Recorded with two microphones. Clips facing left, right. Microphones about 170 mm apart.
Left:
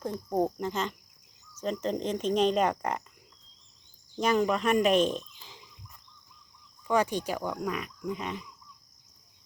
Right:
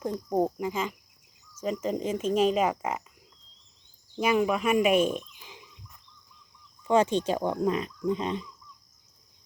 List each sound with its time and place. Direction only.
0.0 s speech: 10° right (ahead or behind)
1.6 s insect: 5° right (ahead or behind)
4.2 s speech: 10° right (ahead or behind)
6.8 s speech: 25° right (ahead or behind)